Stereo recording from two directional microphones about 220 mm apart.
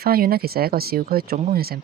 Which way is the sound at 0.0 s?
45° right (ahead or behind).